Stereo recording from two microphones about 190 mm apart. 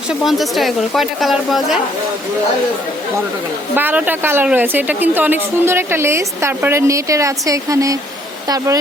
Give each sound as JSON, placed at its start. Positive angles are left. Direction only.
{"t": 0.1, "sound": "speech", "side_deg": 0}
{"t": 3.8, "sound": "speech", "side_deg": -10}